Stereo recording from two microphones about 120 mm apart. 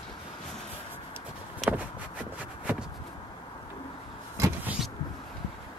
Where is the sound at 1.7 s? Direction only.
10° right (ahead or behind).